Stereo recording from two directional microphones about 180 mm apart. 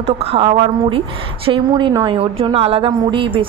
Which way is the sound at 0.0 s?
35° right (ahead or behind).